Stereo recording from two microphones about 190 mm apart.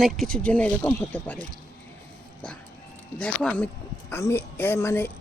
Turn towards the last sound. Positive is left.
turn(degrees=10)  # may be behind; listen again after turning